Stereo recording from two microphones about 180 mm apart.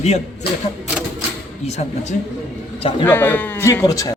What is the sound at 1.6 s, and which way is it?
Speech, 40° left (ahead or behind).